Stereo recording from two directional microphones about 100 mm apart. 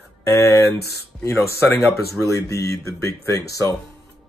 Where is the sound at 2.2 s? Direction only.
30° left (ahead or behind).